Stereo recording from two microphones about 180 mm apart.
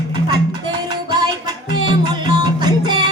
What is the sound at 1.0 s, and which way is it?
Music, 25° right (ahead or behind).